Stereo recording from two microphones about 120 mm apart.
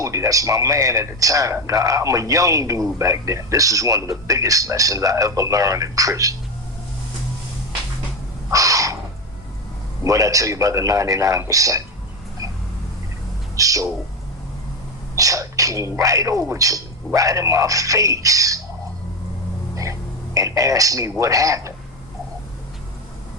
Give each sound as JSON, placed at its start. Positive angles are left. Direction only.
{"t": 0.0, "sound": "speech", "side_deg": -25}
{"t": 8.4, "sound": "a sound", "side_deg": -30}
{"t": 10.0, "sound": "speech", "side_deg": -25}
{"t": 13.6, "sound": "a sound", "side_deg": -30}
{"t": 15.1, "sound": "speech", "side_deg": -25}
{"t": 19.7, "sound": "a man's voice", "side_deg": -25}